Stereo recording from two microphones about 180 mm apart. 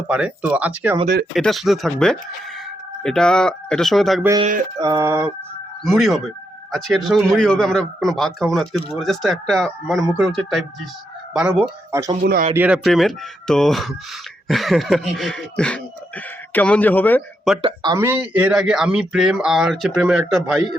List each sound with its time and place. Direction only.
0.1 s speech: 5° right (ahead or behind)
4.8 s speech: 20° right (ahead or behind)
6.0 s speech: centre (ahead or behind)
11.9 s speech: 15° right (ahead or behind)
12.2 s speech: 55° right (ahead or behind)
12.5 s speech: 5° right (ahead or behind); by 17.2 s 10° left (ahead or behind)
17.6 s speech: 30° right (ahead or behind)
17.9 s speech: 15° right (ahead or behind)